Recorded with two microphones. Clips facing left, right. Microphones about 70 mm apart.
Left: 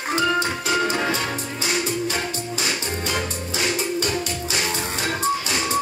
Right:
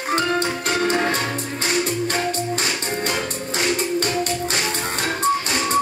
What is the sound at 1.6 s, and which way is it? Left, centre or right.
Music, right.